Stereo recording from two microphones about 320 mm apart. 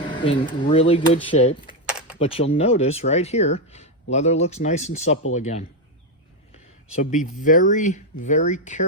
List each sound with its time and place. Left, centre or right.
0.1 s speech: centre
1.9 s a sound: centre
2.1 s speech: centre
6.9 s speech: left